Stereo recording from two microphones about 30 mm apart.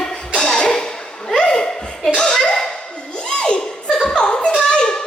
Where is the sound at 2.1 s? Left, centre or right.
Left.